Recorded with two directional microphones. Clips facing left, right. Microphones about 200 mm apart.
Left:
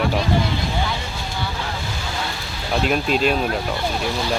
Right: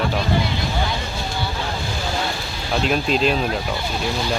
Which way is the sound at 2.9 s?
5° left (ahead or behind).